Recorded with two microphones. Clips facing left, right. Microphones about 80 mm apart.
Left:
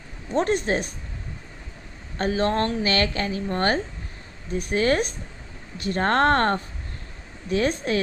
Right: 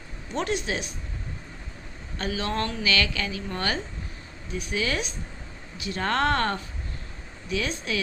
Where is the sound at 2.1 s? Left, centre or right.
Left.